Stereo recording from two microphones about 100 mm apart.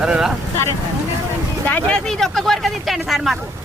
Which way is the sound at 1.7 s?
15° left (ahead or behind).